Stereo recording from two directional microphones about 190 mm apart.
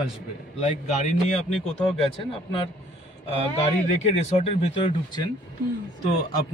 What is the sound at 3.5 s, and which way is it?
Speech, 35° left (ahead or behind).